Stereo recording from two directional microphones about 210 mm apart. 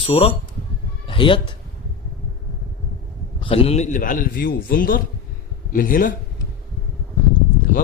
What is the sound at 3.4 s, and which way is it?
A man's voice, 25° left (ahead or behind).